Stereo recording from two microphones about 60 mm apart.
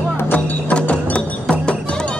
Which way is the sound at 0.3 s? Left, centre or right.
Left.